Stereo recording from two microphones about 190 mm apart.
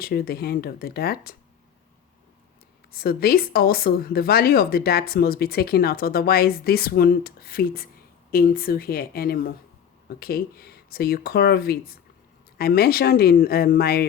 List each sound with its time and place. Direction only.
0.0 s speech: 55° left (ahead or behind)
2.9 s speech: 55° left (ahead or behind)